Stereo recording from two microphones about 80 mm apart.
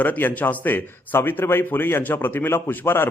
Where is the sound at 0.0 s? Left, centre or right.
Left.